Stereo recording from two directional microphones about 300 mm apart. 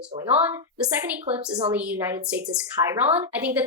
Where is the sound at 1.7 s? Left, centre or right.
Centre.